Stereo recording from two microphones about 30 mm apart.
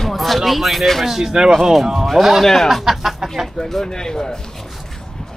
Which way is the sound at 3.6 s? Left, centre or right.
Centre.